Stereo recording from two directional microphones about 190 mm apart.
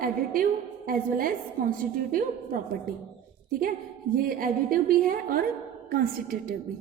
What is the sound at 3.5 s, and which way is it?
A woman's voice, 50° right (ahead or behind).